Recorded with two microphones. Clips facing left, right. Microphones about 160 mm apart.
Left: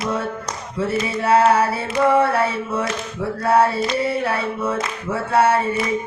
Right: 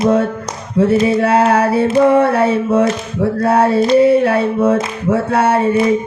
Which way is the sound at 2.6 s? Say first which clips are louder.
Right 11 dB; 55° right (ahead or behind).